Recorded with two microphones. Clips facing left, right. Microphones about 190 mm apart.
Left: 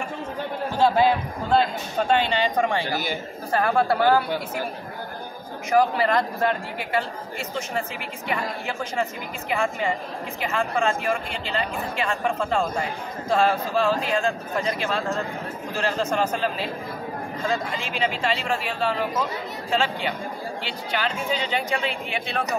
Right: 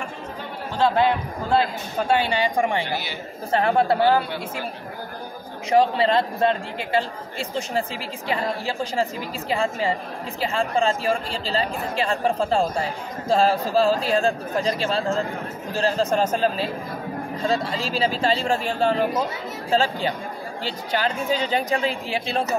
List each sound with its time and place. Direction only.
0.7 s a man's voice: 10° left (ahead or behind)
1.5 s a man's voice: 5° right (ahead or behind); by 4.2 s 20° right (ahead or behind)
5.7 s a man's voice: 25° right (ahead or behind)